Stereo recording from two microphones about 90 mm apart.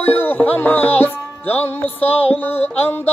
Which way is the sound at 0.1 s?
20° left (ahead or behind).